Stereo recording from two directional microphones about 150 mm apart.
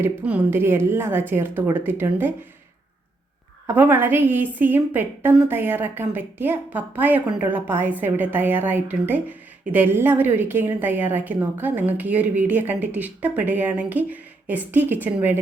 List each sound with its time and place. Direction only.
0.0 s a woman's voice: 10° right (ahead or behind)
3.8 s a woman's voice: 15° right (ahead or behind)